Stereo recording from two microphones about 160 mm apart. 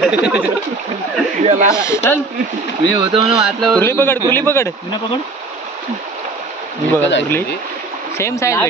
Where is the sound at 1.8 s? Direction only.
15° left (ahead or behind).